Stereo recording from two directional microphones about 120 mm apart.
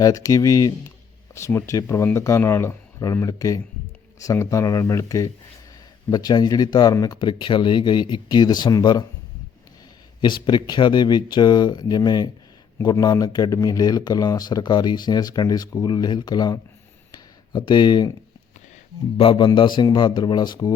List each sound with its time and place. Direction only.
0.0 s speech: 30° left (ahead or behind)
10.2 s speech: 40° left (ahead or behind)
17.1 s a sound: 40° left (ahead or behind)
19.1 s music: 50° left (ahead or behind)
19.5 s speech: 40° left (ahead or behind)